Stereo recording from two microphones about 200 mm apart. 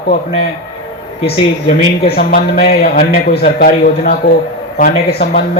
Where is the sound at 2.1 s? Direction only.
50° left (ahead or behind).